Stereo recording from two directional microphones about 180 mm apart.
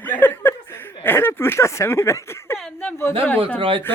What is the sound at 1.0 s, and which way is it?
Speech, 10° left (ahead or behind).